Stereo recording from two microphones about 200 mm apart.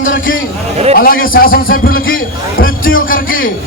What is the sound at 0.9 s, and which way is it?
Speech, 45° left (ahead or behind).